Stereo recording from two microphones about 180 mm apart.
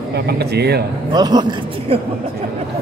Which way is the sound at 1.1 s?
25° right (ahead or behind).